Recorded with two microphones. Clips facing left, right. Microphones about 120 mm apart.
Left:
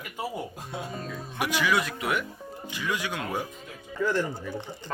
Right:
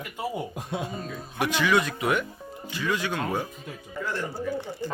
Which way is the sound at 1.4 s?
10° left (ahead or behind).